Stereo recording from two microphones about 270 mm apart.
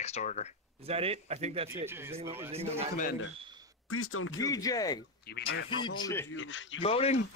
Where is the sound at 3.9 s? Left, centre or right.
Left.